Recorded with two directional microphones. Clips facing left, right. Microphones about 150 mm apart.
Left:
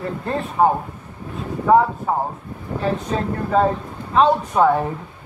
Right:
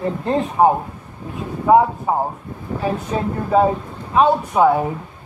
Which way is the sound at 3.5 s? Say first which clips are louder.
Right 2 dB; 10° right (ahead or behind).